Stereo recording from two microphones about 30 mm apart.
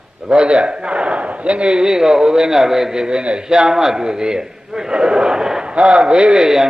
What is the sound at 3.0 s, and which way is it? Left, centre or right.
A man's voice, right.